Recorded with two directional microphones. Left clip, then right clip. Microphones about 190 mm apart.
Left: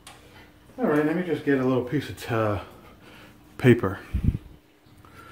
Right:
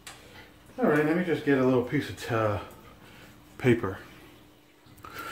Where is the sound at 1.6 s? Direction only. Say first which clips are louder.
Even; 25° left (ahead or behind); by 4.0 s 45° left (ahead or behind).